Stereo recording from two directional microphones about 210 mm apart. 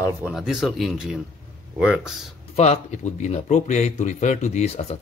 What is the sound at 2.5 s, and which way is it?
Speech, 30° left (ahead or behind).